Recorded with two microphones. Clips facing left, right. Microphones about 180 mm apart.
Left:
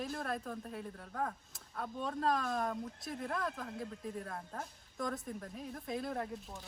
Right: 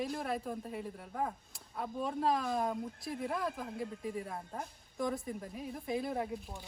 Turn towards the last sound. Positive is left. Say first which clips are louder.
# right 3 dB
turn(degrees=-5)  # may be behind; listen again after turning